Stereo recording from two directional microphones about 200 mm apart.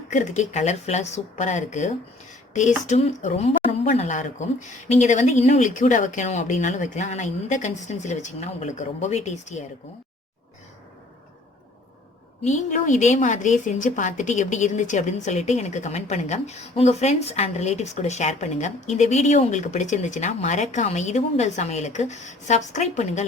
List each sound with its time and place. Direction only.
0.1 s a woman's voice: 35° left (ahead or behind)
12.4 s a woman's voice: 35° left (ahead or behind)